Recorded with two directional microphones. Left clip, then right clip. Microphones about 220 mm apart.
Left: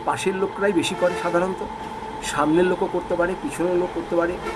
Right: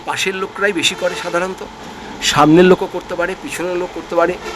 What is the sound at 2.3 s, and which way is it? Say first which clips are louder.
Speech: right 10 dB; 45° right (ahead or behind).